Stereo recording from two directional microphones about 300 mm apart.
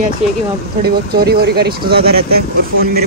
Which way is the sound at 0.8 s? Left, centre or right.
Right.